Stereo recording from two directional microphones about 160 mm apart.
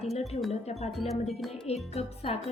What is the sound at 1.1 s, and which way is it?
Speech, centre (ahead or behind).